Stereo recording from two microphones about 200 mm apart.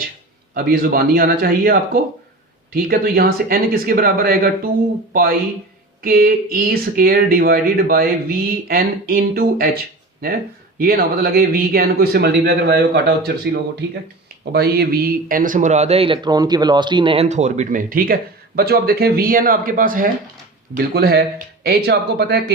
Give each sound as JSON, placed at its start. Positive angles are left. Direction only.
{"t": 0.5, "sound": "speech", "side_deg": -50}
{"t": 6.0, "sound": "speech", "side_deg": -50}
{"t": 10.8, "sound": "speech", "side_deg": -50}